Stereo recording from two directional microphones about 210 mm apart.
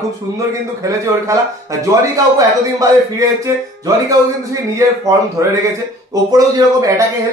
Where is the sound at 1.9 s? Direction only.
15° right (ahead or behind).